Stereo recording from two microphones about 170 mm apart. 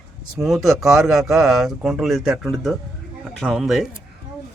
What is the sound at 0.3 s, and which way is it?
Speech, centre (ahead or behind).